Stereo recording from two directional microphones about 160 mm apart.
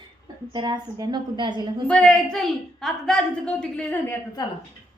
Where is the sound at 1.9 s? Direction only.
5° left (ahead or behind).